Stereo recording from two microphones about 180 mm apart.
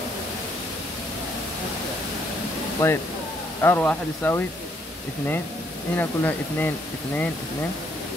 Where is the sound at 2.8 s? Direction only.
15° left (ahead or behind).